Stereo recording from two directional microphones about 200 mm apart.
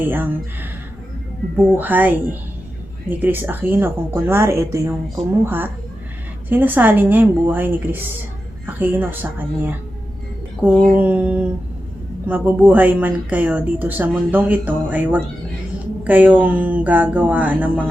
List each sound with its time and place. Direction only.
0.0 s a woman's voice: 10° right (ahead or behind)
1.7 s a woman's voice: 10° right (ahead or behind)
6.5 s a woman's voice: 10° right (ahead or behind)
10.8 s a woman's voice: 5° right (ahead or behind)